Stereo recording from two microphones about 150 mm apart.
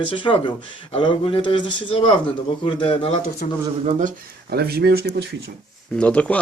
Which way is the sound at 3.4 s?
65° left (ahead or behind).